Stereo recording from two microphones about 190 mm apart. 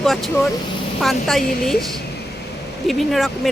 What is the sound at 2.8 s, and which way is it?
Speech, centre (ahead or behind).